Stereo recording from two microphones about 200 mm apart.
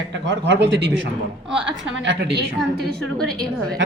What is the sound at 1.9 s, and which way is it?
A man's voice, 60° right (ahead or behind).